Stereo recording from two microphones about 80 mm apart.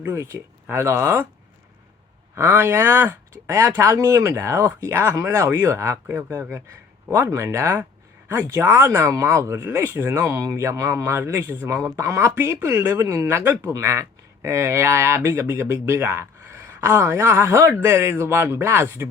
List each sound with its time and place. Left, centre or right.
0.0 s speech: right
2.3 s speech: right